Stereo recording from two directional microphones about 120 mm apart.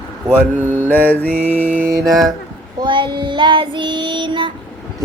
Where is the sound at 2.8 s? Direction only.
40° right (ahead or behind).